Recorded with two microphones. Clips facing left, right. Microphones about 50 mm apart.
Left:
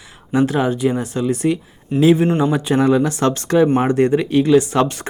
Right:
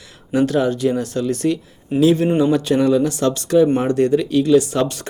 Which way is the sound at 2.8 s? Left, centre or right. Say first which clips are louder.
Left 1 dB; left.